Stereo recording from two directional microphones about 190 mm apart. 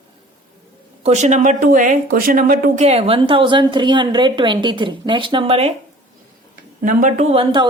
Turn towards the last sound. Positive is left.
turn(degrees=-30)  # may be behind; listen again after turning